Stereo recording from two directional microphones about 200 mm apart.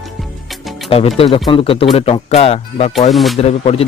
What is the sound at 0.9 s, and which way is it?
Speech, 30° left (ahead or behind).